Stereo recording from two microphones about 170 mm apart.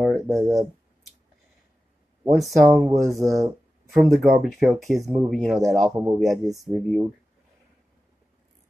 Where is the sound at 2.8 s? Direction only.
20° right (ahead or behind).